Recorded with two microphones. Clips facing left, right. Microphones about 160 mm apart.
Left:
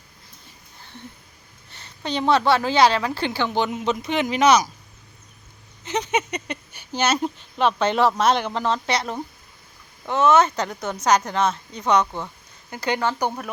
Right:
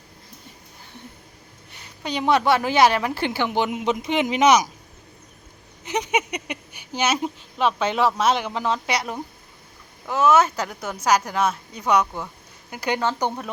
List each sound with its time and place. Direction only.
1.7 s speech: 10° right (ahead or behind)
5.8 s speech: 15° right (ahead or behind)